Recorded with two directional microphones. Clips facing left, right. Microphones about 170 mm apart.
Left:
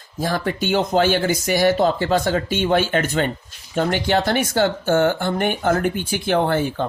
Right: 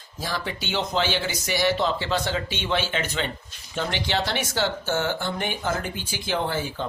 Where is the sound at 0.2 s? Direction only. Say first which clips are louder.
Left 8 dB; 50° left (ahead or behind).